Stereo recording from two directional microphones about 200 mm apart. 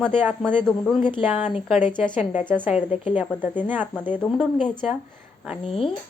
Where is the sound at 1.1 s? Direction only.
30° left (ahead or behind).